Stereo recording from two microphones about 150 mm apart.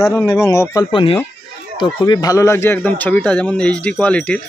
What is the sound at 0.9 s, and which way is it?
Speech, 35° left (ahead or behind).